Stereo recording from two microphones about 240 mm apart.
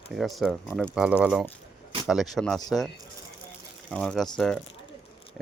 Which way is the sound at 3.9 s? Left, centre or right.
Centre.